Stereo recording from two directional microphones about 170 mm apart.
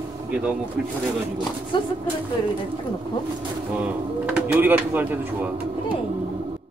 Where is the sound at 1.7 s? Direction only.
30° left (ahead or behind).